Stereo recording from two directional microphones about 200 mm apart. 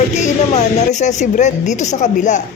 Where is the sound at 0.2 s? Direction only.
35° left (ahead or behind).